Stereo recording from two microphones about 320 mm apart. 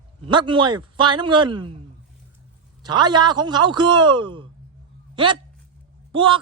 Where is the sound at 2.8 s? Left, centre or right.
Centre.